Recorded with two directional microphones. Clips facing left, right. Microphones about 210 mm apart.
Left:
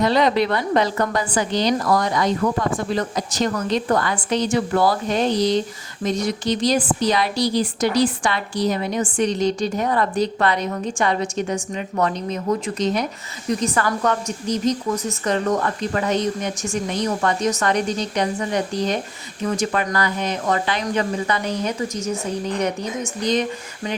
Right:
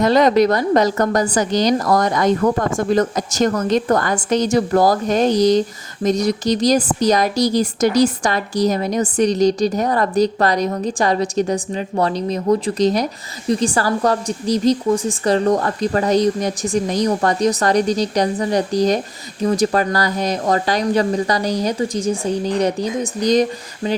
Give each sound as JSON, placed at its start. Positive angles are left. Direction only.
{"t": 0.0, "sound": "a woman's voice", "side_deg": -45}